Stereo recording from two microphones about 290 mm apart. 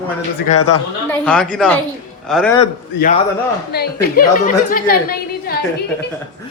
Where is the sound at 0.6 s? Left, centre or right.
Left.